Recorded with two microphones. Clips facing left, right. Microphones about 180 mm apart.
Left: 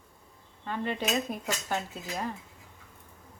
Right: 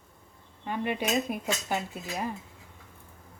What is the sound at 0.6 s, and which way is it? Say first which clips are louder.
Cutlery: right 1 dB; 15° right (ahead or behind).